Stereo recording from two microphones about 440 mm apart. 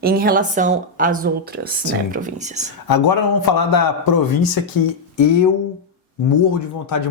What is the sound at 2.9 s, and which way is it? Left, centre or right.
A man's voice, left.